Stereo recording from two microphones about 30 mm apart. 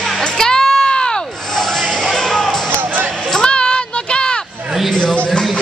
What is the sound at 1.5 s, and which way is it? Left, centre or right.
Basketball bounce, centre.